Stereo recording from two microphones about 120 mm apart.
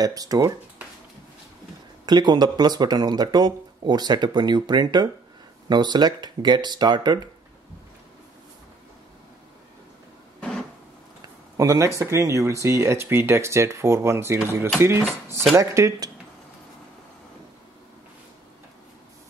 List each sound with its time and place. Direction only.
0.0 s speech: 30° right (ahead or behind)
2.0 s speech: 35° right (ahead or behind)
11.5 s speech: 25° right (ahead or behind)